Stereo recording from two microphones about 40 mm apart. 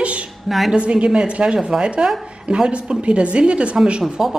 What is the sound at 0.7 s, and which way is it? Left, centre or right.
A woman's voice, right.